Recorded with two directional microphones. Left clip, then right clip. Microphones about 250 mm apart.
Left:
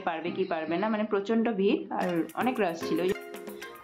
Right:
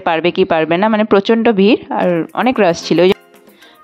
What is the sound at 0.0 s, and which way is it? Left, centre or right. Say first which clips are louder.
A woman's voice: right 17 dB; right.